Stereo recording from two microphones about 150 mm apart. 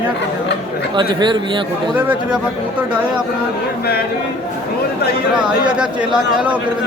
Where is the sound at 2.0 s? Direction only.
10° right (ahead or behind).